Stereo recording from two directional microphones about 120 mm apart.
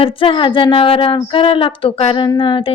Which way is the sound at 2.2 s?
40° left (ahead or behind).